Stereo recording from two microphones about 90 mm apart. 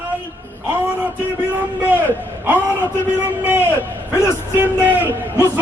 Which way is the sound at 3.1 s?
25° right (ahead or behind).